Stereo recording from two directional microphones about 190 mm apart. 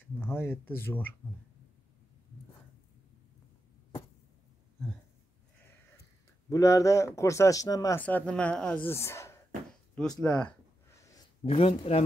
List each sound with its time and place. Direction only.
0.0 s speech: 10° left (ahead or behind)
6.5 s speech: 15° left (ahead or behind)
10.2 s a sound: 5° left (ahead or behind)
11.4 s speech: 30° left (ahead or behind)